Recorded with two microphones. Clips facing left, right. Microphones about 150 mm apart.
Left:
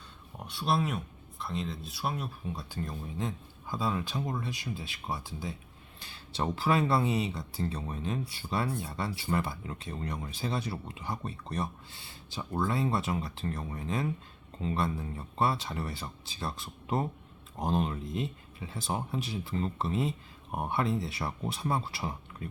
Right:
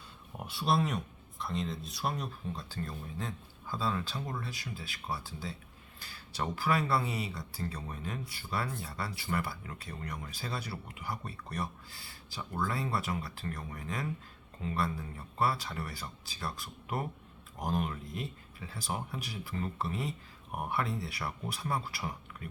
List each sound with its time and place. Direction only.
0.3 s speech: 5° right (ahead or behind); by 22.4 s 25° left (ahead or behind)